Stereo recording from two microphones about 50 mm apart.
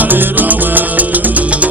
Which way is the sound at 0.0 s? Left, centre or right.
Right.